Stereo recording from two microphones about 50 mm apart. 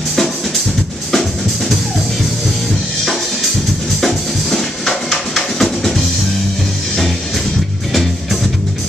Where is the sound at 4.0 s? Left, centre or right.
Centre.